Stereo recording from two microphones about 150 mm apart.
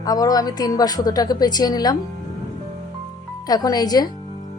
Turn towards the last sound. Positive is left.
turn(degrees=25)  # may be behind; listen again after turning